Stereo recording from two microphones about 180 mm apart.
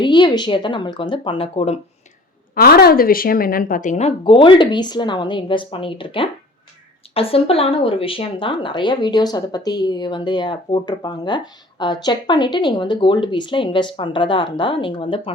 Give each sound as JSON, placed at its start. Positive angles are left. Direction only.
{"t": 0.0, "sound": "speech", "side_deg": 25}
{"t": 2.6, "sound": "a woman's voice", "side_deg": 60}
{"t": 4.2, "sound": "speech", "side_deg": 30}